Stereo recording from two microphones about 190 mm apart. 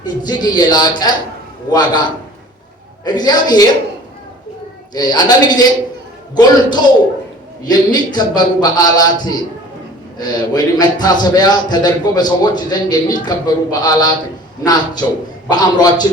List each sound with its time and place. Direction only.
0.0 s a man's voice: 20° left (ahead or behind)
4.9 s a man's voice: 20° left (ahead or behind)
10.2 s a man's voice: 20° left (ahead or behind)